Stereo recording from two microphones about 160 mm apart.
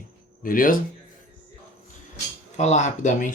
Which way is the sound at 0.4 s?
60° left (ahead or behind).